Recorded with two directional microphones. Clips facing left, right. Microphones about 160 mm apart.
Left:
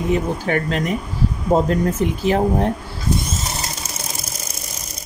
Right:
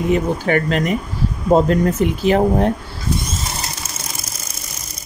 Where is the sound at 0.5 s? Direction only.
90° right.